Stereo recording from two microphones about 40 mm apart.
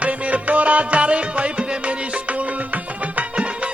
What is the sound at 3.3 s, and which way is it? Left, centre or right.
Music, right.